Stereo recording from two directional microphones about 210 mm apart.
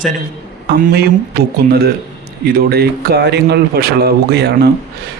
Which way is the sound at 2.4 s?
45° right (ahead or behind).